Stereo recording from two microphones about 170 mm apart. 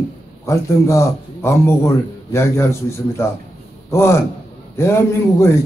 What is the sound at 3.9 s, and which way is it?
Speech, 15° left (ahead or behind).